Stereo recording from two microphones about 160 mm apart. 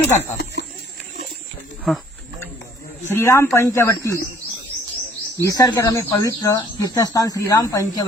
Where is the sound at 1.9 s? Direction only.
Centre (ahead or behind).